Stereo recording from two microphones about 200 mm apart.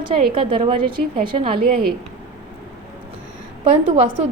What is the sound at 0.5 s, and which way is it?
A woman's voice, 25° right (ahead or behind).